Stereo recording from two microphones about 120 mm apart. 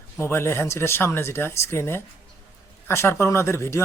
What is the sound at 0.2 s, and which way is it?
Speech, 20° left (ahead or behind).